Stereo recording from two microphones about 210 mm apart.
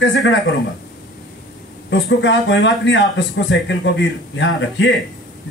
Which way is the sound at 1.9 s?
60° left (ahead or behind).